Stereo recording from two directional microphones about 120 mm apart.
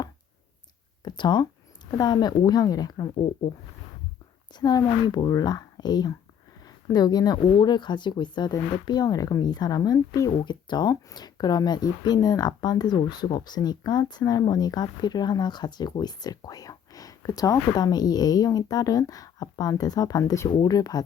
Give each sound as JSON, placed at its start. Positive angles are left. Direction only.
{"t": 1.0, "sound": "speech", "side_deg": 40}
{"t": 4.5, "sound": "speech", "side_deg": 35}